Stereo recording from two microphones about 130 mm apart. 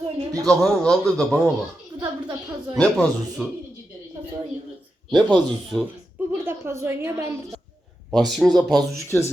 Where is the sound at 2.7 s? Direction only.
5° left (ahead or behind).